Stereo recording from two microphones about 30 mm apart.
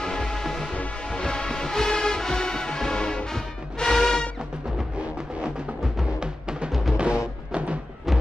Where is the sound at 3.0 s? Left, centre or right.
Left.